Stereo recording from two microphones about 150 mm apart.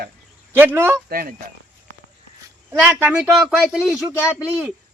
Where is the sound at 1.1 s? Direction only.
75° right (ahead or behind).